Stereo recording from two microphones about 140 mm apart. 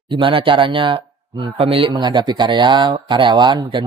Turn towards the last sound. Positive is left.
turn(degrees=-35)  # may be behind; listen again after turning